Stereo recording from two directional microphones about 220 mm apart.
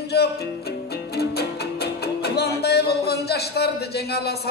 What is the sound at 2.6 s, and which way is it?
Speech, 45° left (ahead or behind).